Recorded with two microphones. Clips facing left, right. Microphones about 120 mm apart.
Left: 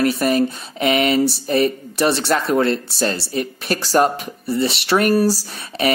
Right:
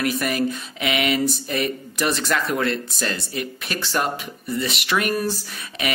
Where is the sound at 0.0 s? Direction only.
30° left (ahead or behind).